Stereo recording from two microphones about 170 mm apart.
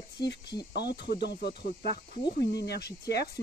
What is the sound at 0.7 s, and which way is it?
Speech, 75° left (ahead or behind).